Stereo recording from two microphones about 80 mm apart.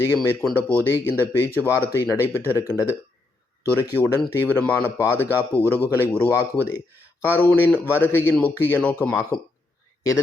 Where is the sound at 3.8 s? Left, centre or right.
Left.